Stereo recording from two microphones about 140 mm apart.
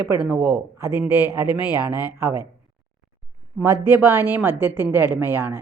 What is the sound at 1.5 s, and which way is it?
Speech, 30° left (ahead or behind).